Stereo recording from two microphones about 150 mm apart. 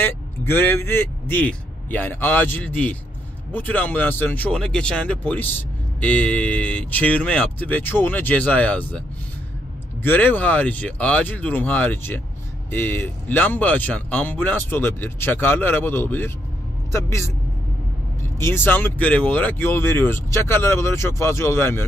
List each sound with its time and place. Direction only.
0.0 s speech: 15° left (ahead or behind)
10.0 s a man's voice: 10° left (ahead or behind)
18.4 s speech: 15° left (ahead or behind)